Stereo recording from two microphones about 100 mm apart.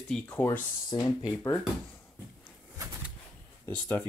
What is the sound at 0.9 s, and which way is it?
Speech, 45° left (ahead or behind).